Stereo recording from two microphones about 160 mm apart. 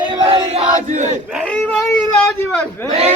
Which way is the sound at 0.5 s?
45° right (ahead or behind).